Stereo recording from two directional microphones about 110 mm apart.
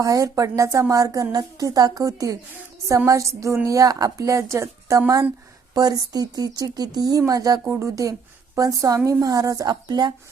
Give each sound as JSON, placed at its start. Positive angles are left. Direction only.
{"t": 0.0, "sound": "a woman's voice", "side_deg": -30}